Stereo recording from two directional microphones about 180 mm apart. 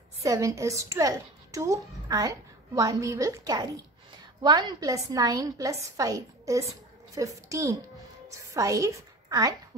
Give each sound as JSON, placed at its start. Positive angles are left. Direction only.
{"t": 0.2, "sound": "a woman's voice", "side_deg": -20}